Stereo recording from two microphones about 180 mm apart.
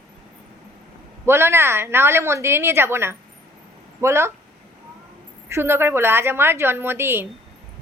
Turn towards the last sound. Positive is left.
turn(degrees=-15)  # may be behind; listen again after turning